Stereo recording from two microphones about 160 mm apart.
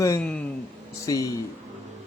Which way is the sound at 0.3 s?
10° left (ahead or behind).